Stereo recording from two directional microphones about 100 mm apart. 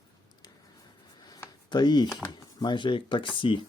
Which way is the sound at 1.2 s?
45° left (ahead or behind).